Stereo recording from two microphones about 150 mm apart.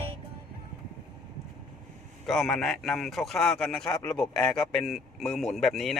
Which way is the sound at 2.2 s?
Centre (ahead or behind).